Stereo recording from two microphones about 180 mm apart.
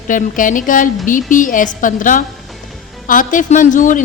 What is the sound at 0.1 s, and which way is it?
A woman's voice, 45° left (ahead or behind).